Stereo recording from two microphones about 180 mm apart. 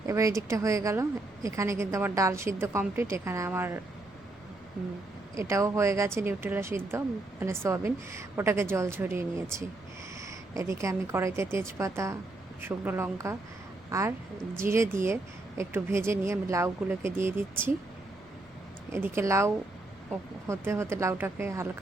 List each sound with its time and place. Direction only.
0.1 s a woman's voice: 15° right (ahead or behind)
5.4 s a woman's voice: 15° right (ahead or behind)
18.9 s a woman's voice: 15° right (ahead or behind)